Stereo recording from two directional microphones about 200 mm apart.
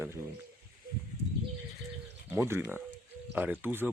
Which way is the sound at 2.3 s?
10° right (ahead or behind).